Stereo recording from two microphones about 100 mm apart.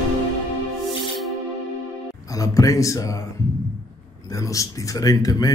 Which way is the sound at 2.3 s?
35° left (ahead or behind).